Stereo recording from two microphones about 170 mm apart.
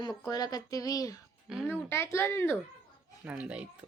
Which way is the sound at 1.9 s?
15° left (ahead or behind).